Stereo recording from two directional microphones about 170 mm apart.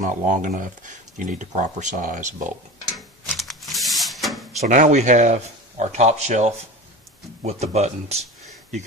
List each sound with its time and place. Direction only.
0.0 s speech: 45° right (ahead or behind)
3.3 s a sound: centre (ahead or behind)
4.6 s speech: 45° right (ahead or behind)